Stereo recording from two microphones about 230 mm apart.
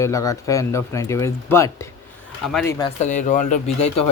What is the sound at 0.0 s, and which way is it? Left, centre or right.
Speech, centre.